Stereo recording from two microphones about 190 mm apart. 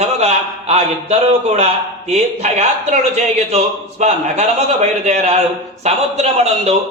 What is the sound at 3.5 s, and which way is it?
A man's voice, 35° right (ahead or behind).